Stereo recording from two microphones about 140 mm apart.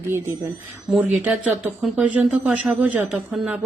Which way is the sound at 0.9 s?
10° right (ahead or behind).